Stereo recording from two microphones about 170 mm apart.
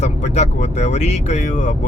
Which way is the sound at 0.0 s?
45° left (ahead or behind).